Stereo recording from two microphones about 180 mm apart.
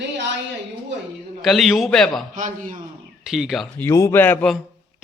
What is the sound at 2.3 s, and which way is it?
Speech, 45° right (ahead or behind).